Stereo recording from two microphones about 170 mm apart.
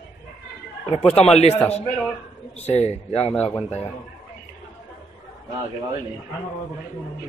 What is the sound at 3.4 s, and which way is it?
Speech, centre (ahead or behind).